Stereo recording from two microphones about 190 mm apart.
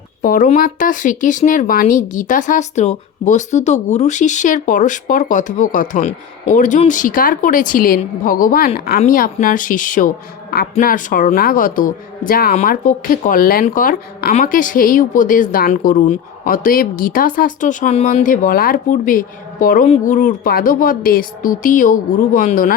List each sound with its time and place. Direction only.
0.2 s speech: 45° left (ahead or behind)